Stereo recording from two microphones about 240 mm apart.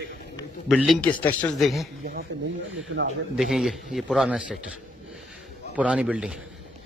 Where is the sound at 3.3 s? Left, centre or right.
Centre.